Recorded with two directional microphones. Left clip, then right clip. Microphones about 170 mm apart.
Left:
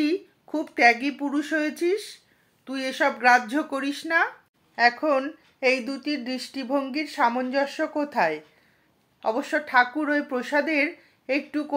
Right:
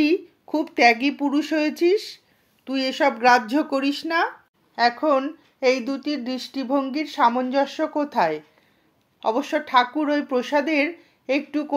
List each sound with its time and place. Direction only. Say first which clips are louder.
0.0 s speech: right 5 dB; 40° right (ahead or behind)
4.7 s speech: right 2 dB; 25° right (ahead or behind)